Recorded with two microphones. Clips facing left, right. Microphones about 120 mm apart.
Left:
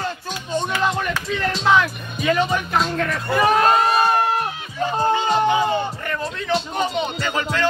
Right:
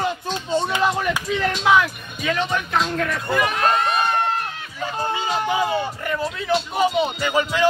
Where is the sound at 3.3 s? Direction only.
35° left (ahead or behind).